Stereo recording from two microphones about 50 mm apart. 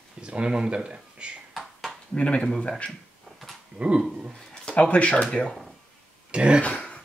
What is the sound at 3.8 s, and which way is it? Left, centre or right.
Speech, right.